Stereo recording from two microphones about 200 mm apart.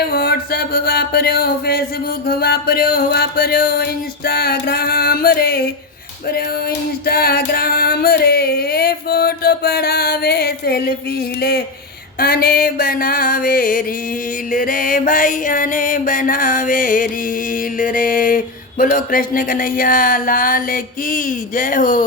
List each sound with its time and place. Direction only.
0.0 s music: 50° left (ahead or behind)